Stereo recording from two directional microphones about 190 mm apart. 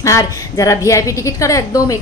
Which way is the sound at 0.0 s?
15° left (ahead or behind).